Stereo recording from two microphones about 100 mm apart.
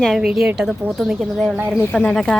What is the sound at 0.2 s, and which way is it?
A woman's voice, 10° right (ahead or behind).